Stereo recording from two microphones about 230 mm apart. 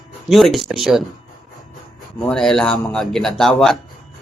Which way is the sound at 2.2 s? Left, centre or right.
Centre.